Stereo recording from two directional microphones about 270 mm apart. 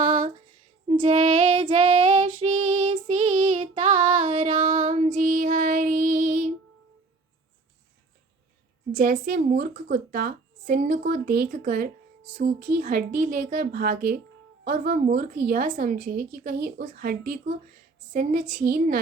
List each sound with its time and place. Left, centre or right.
0.0 s a sound: centre
0.9 s child singing: centre
8.9 s a woman's voice: right